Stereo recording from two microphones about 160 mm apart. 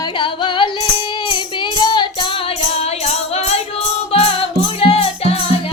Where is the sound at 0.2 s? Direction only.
30° left (ahead or behind).